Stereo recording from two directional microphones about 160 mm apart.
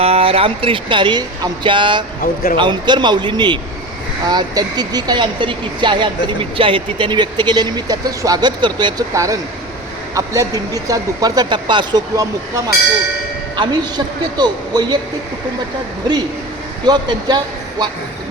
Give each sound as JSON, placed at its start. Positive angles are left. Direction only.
{"t": 0.0, "sound": "speech", "side_deg": -35}
{"t": 2.2, "sound": "speech", "side_deg": 60}
{"t": 2.6, "sound": "speech", "side_deg": -30}
{"t": 16.8, "sound": "speech", "side_deg": -25}